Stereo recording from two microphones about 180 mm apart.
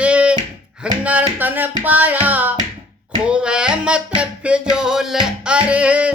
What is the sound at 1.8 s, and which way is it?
Music, 10° right (ahead or behind).